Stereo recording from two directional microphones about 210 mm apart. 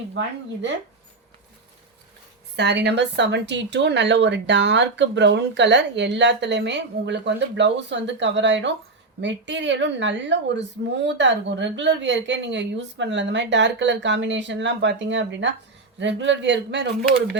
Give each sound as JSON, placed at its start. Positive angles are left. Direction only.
{"t": 2.6, "sound": "speech", "side_deg": -55}